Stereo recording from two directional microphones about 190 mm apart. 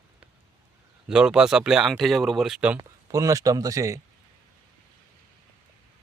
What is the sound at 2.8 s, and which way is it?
Speech, 15° right (ahead or behind).